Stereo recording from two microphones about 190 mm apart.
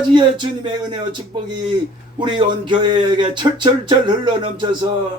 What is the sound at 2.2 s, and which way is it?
Speech, 25° right (ahead or behind).